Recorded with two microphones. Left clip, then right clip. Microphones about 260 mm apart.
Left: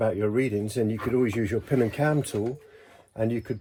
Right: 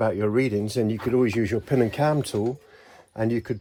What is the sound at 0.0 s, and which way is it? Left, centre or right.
Speech, right.